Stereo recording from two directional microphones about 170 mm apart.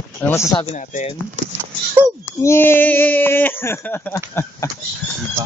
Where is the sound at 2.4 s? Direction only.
15° left (ahead or behind).